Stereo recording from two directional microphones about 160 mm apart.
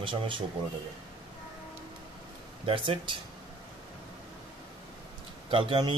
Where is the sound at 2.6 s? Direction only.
35° right (ahead or behind).